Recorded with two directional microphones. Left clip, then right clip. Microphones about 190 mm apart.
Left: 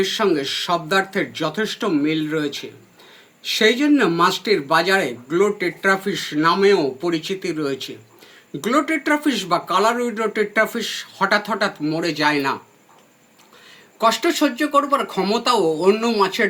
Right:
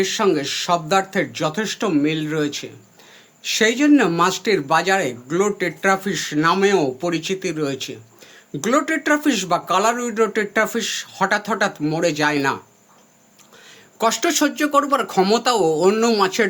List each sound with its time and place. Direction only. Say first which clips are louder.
0.0 s speech: even; 50° right (ahead or behind)
14.0 s speech: left 1 dB; 55° right (ahead or behind)